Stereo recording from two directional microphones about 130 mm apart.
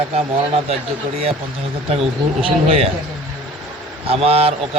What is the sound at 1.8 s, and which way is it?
A man's voice, 50° right (ahead or behind).